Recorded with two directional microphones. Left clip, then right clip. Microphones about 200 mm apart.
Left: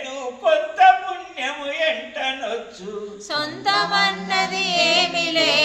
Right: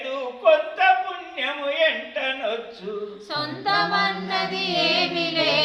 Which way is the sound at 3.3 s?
40° left (ahead or behind).